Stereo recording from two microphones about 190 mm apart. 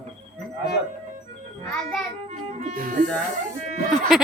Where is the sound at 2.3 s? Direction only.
45° right (ahead or behind).